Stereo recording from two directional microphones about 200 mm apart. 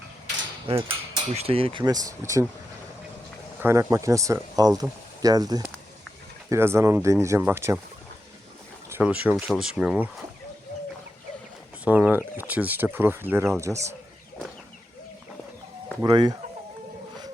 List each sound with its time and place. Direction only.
0.7 s speech: 30° right (ahead or behind)
3.6 s speech: 15° right (ahead or behind)
8.9 s speech: 10° right (ahead or behind)
11.9 s speech: 10° right (ahead or behind)
16.0 s speech: 20° right (ahead or behind)